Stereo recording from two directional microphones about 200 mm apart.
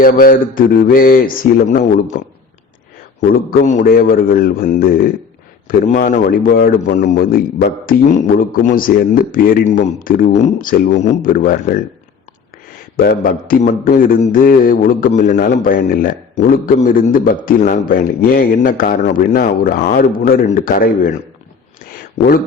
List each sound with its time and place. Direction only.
0.0 s a man's voice: 45° left (ahead or behind)
3.5 s a man's voice: 45° left (ahead or behind)
13.0 s a man's voice: 45° left (ahead or behind)